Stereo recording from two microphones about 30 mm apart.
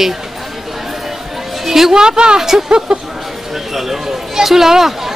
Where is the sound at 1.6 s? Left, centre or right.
Centre.